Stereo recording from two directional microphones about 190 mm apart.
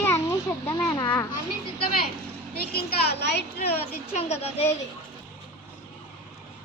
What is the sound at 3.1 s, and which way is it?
Speech, 60° left (ahead or behind).